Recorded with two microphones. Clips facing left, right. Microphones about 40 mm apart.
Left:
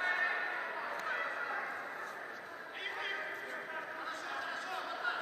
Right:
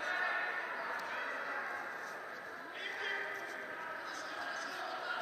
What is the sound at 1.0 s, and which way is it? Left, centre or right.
Bow-wow, left.